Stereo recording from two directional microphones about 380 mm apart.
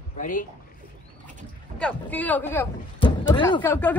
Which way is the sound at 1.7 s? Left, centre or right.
Centre.